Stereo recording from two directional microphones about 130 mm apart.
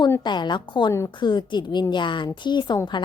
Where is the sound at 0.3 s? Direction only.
35° left (ahead or behind).